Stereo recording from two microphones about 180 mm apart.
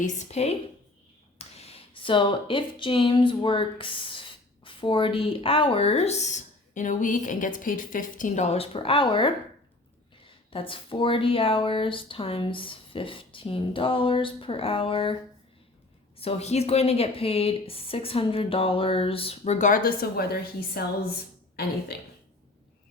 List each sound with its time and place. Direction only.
0.0 s a woman's voice: 40° left (ahead or behind)
16.1 s a woman's voice: 35° left (ahead or behind); by 20.8 s 60° left (ahead or behind)
21.9 s speech: 65° left (ahead or behind)